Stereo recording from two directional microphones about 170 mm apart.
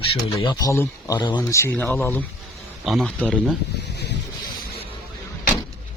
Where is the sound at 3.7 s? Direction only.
80° left.